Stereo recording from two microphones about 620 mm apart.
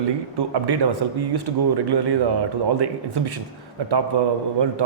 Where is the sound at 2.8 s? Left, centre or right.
Right.